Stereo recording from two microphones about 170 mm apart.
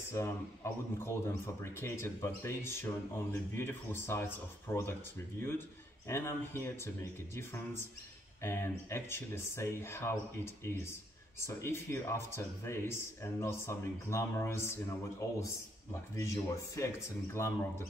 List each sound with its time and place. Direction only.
0.1 s speech: 15° left (ahead or behind)
6.0 s speech: 15° left (ahead or behind)